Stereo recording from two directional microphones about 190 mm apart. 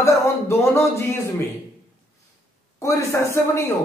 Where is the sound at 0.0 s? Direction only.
15° left (ahead or behind).